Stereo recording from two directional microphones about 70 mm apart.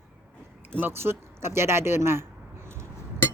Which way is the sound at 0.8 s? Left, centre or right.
Right.